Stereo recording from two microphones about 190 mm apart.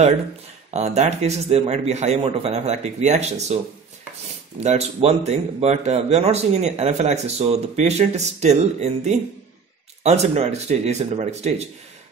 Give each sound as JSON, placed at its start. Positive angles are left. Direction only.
{"t": 0.7, "sound": "a man's voice", "side_deg": -35}
{"t": 4.6, "sound": "a man's voice", "side_deg": -35}